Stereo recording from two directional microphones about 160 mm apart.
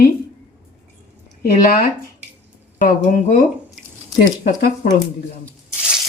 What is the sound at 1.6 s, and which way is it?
Speech, 60° left (ahead or behind).